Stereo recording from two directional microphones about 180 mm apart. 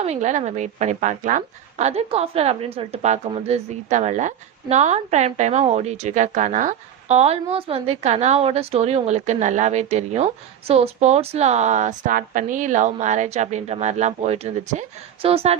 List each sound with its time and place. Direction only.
0.0 s a woman's voice: 40° right (ahead or behind)